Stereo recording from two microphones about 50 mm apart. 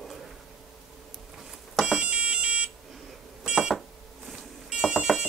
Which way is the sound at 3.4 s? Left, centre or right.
Centre.